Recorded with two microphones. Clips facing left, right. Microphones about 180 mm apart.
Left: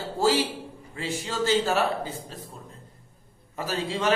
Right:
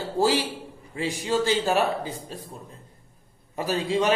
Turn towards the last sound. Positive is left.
turn(degrees=-15)  # may be behind; listen again after turning